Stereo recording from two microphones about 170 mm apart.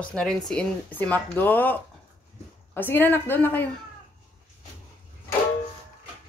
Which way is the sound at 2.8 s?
10° left (ahead or behind).